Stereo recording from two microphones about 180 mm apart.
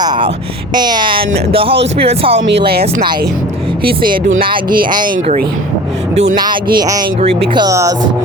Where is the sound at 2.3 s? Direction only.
65° right (ahead or behind).